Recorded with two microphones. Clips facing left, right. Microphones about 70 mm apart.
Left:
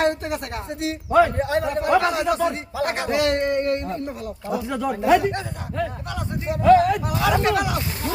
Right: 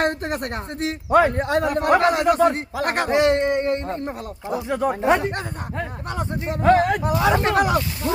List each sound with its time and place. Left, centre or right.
0.1 s a man's voice: right
3.1 s speech: right
3.8 s speech: right
7.0 s speech: right